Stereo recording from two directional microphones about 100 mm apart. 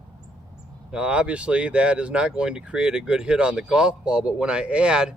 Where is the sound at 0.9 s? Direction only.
10° right (ahead or behind).